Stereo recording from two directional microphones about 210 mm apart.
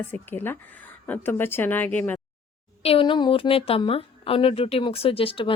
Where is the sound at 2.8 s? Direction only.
25° left (ahead or behind).